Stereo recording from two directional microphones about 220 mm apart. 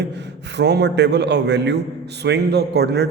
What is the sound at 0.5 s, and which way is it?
A man's voice, 50° right (ahead or behind).